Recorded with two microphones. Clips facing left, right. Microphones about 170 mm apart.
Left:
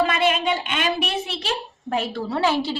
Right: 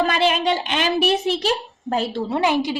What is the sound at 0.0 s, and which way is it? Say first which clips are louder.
A child's voice: right 1 dB; 35° right (ahead or behind).